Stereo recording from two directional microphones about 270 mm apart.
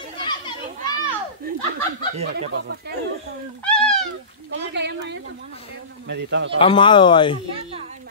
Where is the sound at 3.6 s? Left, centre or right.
Centre.